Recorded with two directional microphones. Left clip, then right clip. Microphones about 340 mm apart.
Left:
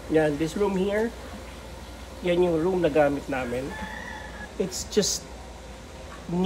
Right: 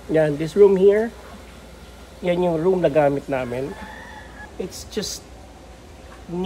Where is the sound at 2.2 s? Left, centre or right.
Right.